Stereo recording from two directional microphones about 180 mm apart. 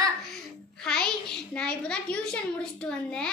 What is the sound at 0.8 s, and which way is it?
A child's voice, 5° left (ahead or behind).